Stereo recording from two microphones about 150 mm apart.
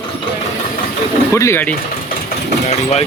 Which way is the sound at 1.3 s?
20° left (ahead or behind).